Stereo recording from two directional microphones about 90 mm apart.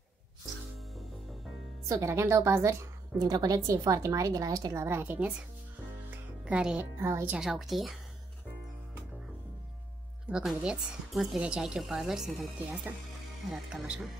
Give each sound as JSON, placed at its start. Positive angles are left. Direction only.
{"t": 1.9, "sound": "a woman's voice", "side_deg": -35}
{"t": 3.3, "sound": "a woman's voice", "side_deg": -45}
{"t": 4.8, "sound": "a woman's voice", "side_deg": -25}
{"t": 6.0, "sound": "music", "side_deg": -15}
{"t": 7.0, "sound": "speech", "side_deg": -30}
{"t": 7.2, "sound": "speech", "side_deg": -5}
{"t": 10.3, "sound": "speech", "side_deg": -10}
{"t": 13.5, "sound": "speech", "side_deg": -10}